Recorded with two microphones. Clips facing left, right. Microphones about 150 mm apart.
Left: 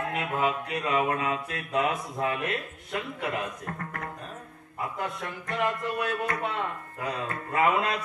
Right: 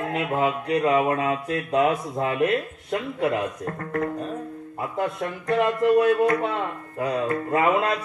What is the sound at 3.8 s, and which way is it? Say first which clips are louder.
Speech: right 11 dB; 30° right (ahead or behind).